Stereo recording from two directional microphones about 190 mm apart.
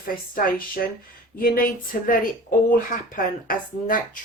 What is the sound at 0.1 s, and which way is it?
Speech, 50° left (ahead or behind).